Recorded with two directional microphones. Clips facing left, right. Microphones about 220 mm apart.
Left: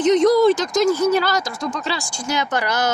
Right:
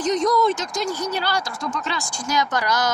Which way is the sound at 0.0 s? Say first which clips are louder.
Left 6 dB; 25° left (ahead or behind).